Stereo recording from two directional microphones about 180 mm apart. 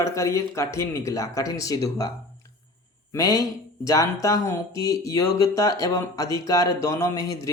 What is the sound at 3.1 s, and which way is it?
Speech, 20° left (ahead or behind).